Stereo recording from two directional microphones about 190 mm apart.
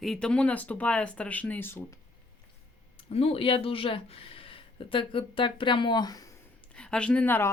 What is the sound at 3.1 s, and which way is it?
Speech, 30° left (ahead or behind).